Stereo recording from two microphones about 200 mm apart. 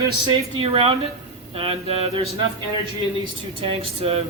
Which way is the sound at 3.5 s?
30° right (ahead or behind).